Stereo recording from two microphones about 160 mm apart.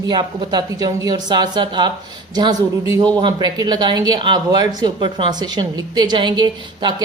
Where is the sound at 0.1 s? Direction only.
25° right (ahead or behind).